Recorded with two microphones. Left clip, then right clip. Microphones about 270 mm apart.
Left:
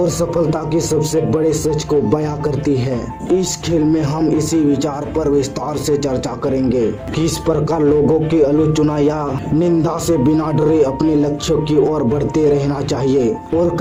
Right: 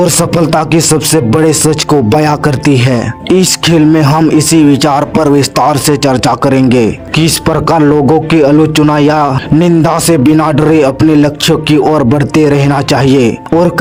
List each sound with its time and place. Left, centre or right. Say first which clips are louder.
0.0 s speech: right 7 dB; right